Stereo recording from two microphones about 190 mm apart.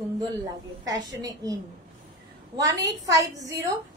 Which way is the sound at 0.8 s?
20° right (ahead or behind).